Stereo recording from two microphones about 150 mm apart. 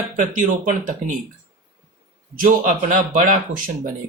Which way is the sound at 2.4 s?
65° right (ahead or behind).